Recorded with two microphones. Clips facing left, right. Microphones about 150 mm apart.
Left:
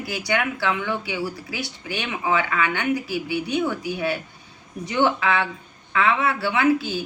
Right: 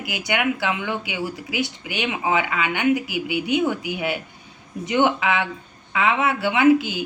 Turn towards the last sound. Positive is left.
turn(degrees=-20)  # may be behind; listen again after turning